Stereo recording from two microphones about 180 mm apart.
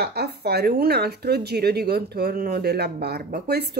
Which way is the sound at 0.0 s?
65° right (ahead or behind).